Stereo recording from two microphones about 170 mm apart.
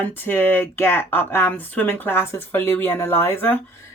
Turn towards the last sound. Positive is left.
turn(degrees=10)  # may be behind; listen again after turning